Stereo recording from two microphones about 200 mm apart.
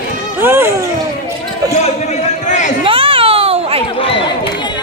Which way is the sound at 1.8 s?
35° left (ahead or behind).